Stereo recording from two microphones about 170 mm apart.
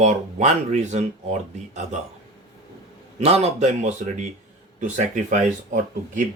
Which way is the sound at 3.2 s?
35° right (ahead or behind).